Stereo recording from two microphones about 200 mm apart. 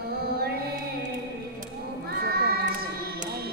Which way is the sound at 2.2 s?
50° right (ahead or behind).